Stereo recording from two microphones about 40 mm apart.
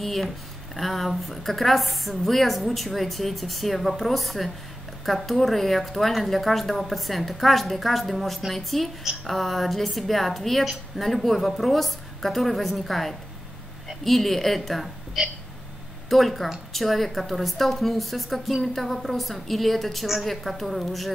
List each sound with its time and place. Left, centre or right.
0.0 s speech: centre
15.2 s hiccup: centre
16.1 s speech: centre